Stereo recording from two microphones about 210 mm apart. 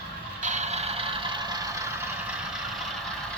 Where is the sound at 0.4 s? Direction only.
35° right (ahead or behind); by 2.8 s 5° right (ahead or behind).